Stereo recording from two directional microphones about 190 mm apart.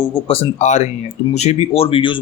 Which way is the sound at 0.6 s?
35° left (ahead or behind).